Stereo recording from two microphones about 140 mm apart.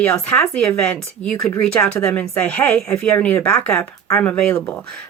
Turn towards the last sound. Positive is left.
turn(degrees=15)  # may be behind; listen again after turning